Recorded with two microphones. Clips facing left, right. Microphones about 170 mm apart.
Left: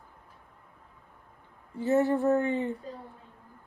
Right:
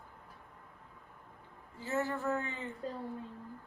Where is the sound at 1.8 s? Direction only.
20° left (ahead or behind).